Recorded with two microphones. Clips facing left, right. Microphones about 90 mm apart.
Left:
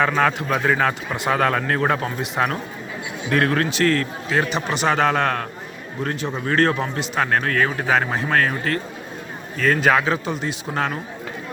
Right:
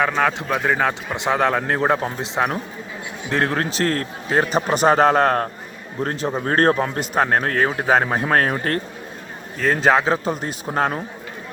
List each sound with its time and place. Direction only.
0.4 s speech: 5° right (ahead or behind)
1.1 s speech: 20° right (ahead or behind); by 7.3 s 45° right (ahead or behind)
7.3 s speech: 30° right (ahead or behind)
9.6 s speech: 25° right (ahead or behind)